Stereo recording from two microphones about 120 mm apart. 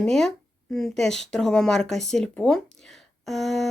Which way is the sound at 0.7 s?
5° left (ahead or behind).